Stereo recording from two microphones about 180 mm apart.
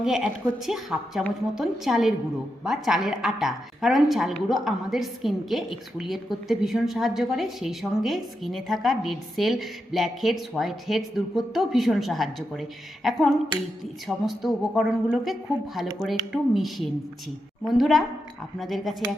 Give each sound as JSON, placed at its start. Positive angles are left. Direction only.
{"t": 0.0, "sound": "a woman's voice", "side_deg": 0}